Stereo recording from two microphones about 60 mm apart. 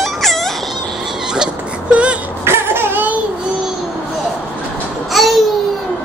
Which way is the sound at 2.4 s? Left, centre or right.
Right.